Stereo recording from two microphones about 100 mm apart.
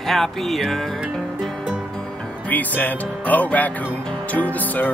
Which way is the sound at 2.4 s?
15° left (ahead or behind).